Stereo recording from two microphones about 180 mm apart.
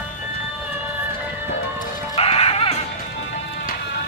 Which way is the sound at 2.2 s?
35° left (ahead or behind).